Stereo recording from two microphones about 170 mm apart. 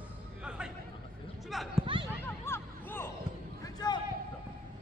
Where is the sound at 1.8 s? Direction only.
30° right (ahead or behind).